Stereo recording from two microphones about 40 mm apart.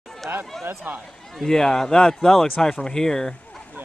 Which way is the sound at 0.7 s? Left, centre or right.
Right.